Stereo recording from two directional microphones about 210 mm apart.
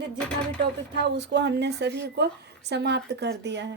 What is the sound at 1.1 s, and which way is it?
A woman's voice, 55° right (ahead or behind).